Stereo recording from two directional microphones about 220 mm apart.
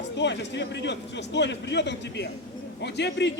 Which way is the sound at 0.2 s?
55° left (ahead or behind).